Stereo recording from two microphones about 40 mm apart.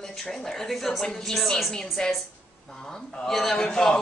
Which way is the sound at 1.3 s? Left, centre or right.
Centre.